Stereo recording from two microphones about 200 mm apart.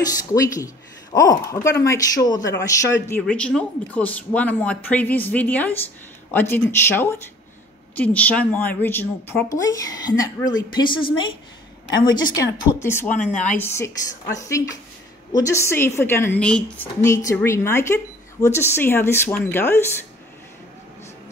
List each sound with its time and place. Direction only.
0.3 s a woman's voice: 15° left (ahead or behind)
15.3 s speech: 15° left (ahead or behind)